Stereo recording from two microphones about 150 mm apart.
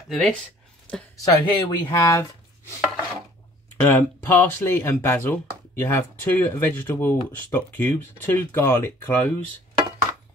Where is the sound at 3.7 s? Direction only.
15° left (ahead or behind).